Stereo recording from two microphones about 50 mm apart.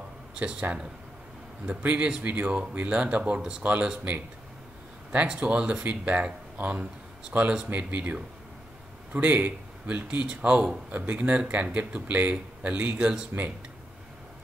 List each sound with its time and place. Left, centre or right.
0.4 s speech: right
2.0 s speech: centre
5.3 s speech: centre
5.9 s speech: right
6.2 s speech: centre
7.6 s speech: right
10.9 s speech: right